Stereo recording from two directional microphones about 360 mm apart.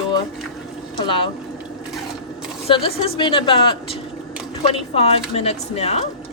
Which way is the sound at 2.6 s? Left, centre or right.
Centre.